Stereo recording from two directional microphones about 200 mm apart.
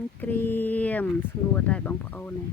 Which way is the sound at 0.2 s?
10° left (ahead or behind).